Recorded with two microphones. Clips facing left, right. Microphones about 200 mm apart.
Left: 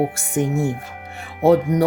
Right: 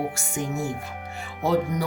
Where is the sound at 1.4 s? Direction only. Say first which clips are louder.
Left 9 dB; 60° left (ahead or behind).